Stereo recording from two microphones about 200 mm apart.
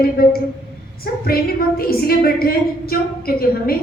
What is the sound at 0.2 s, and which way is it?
Speech, 50° left (ahead or behind).